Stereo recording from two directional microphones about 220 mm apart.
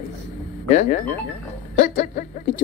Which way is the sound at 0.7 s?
35° left (ahead or behind).